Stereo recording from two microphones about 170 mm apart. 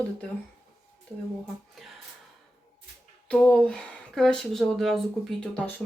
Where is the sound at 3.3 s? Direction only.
5° left (ahead or behind).